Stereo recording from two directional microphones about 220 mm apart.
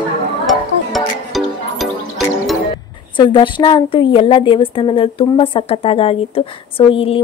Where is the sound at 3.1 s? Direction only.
20° left (ahead or behind).